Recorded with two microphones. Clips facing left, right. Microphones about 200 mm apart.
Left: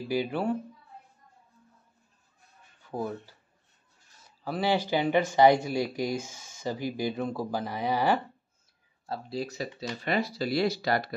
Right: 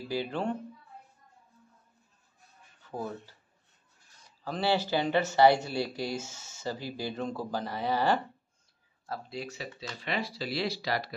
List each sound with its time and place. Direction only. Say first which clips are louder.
0.1 s speech: left 3 dB; 10° left (ahead or behind)
2.8 s speech: left 4 dB; 15° left (ahead or behind)
4.5 s speech: left 2 dB; 10° left (ahead or behind)
9.0 s speech: left 4 dB; 30° left (ahead or behind); by 11.1 s 50° left (ahead or behind)